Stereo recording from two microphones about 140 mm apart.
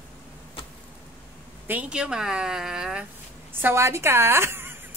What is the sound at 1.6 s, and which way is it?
A woman's voice, 10° right (ahead or behind).